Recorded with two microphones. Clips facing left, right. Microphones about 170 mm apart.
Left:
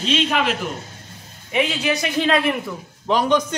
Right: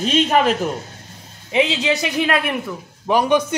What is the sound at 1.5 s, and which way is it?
A man's voice, 25° right (ahead or behind).